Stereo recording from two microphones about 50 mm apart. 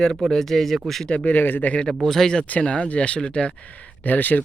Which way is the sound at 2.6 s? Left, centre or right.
Left.